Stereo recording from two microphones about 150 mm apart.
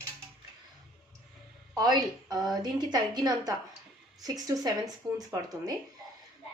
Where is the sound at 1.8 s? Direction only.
25° right (ahead or behind).